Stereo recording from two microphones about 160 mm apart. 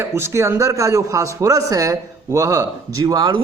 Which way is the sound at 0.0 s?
15° right (ahead or behind).